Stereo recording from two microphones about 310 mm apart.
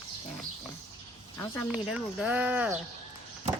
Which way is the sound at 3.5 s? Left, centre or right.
Right.